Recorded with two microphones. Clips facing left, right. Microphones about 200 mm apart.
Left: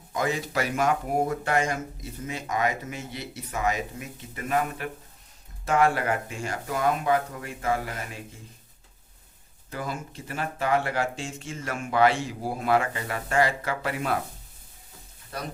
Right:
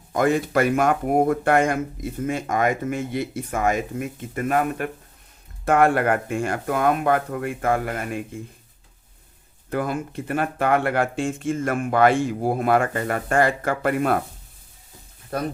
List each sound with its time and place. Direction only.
0.1 s speech: 55° right (ahead or behind)
9.6 s speech: 55° right (ahead or behind)
15.3 s speech: 55° right (ahead or behind)